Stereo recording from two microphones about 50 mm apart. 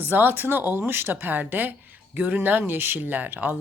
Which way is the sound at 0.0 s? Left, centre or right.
Right.